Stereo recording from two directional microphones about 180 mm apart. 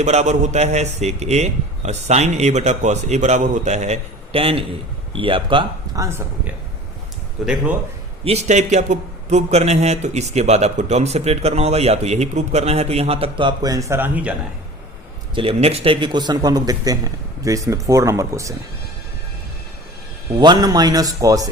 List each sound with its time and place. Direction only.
0.0 s a man's voice: 40° right (ahead or behind)
7.4 s a man's voice: 10° right (ahead or behind)
8.2 s a man's voice: 35° right (ahead or behind); by 14.3 s 10° right (ahead or behind)
15.4 s a man's voice: 30° right (ahead or behind); by 18.5 s 15° right (ahead or behind)
20.4 s a man's voice: 25° right (ahead or behind)